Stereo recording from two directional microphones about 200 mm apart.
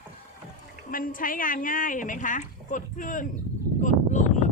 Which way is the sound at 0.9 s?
45° left (ahead or behind).